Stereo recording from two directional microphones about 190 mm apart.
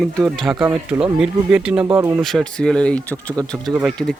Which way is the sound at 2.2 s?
5° left (ahead or behind).